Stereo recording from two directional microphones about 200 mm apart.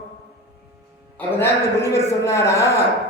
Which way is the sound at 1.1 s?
10° left (ahead or behind).